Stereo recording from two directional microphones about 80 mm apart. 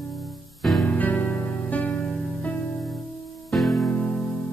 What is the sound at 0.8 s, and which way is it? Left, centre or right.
Music, left.